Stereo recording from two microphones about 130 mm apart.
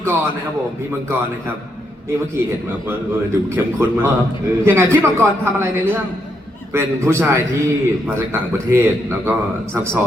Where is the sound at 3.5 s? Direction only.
15° right (ahead or behind).